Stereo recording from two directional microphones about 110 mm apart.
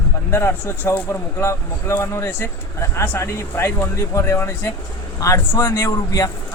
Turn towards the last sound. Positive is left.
turn(degrees=25)  # may be behind; listen again after turning